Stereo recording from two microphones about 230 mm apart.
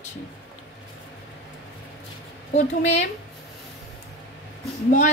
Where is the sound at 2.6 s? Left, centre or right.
Left.